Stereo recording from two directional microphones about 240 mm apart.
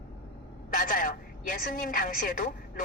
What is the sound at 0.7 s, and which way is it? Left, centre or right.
A woman's voice, left.